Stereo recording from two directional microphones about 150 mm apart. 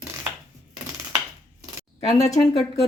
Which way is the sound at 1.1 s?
25° right (ahead or behind).